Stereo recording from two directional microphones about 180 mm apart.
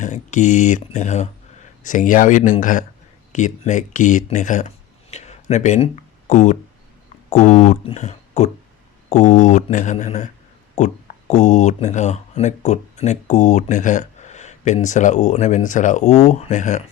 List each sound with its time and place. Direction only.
0.0 s speech: 40° left (ahead or behind)
5.1 s a sound: 40° left (ahead or behind)
7.3 s speech: 40° left (ahead or behind)